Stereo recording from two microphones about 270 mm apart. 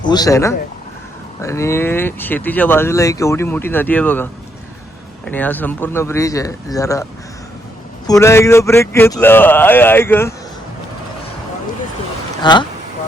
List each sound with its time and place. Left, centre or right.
0.0 s speech: centre
12.4 s speech: centre